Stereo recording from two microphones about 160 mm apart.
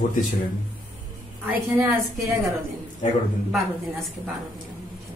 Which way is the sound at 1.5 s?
10° right (ahead or behind).